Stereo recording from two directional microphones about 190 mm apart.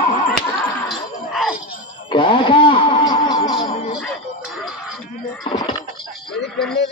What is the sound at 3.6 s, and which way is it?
Music, 30° left (ahead or behind).